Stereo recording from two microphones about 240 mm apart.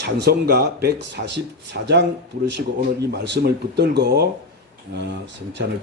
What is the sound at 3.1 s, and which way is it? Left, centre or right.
Speech, right.